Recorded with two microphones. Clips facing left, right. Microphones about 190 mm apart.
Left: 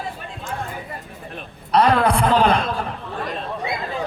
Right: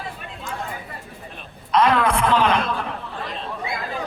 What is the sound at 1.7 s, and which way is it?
Speech, 35° left (ahead or behind).